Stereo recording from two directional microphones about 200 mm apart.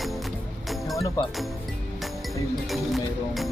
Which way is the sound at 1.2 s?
15° left (ahead or behind).